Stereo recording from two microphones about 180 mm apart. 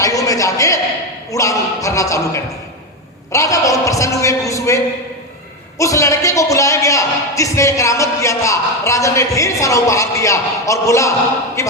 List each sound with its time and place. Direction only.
0.0 s a sound: 20° left (ahead or behind)
1.3 s speech: 20° left (ahead or behind)
5.8 s speech: 20° left (ahead or behind)